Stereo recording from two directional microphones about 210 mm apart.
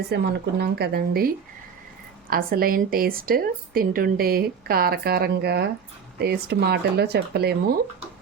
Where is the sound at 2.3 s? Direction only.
45° right (ahead or behind).